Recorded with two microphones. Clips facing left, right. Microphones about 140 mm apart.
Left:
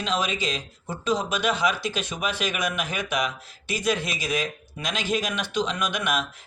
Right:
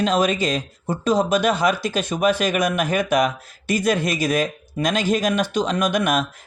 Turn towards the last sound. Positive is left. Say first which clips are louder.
# right 7 dB
turn(degrees=-45)  # may be behind; listen again after turning